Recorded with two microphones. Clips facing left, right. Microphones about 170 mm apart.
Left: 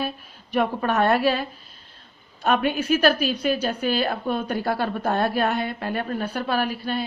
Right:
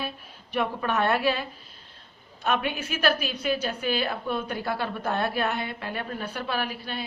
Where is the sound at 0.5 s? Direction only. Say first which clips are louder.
Left 5 dB; 45° left (ahead or behind).